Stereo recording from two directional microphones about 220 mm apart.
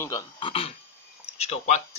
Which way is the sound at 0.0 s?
15° left (ahead or behind).